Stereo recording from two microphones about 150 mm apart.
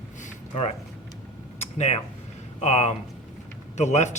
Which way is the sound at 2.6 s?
50° left (ahead or behind).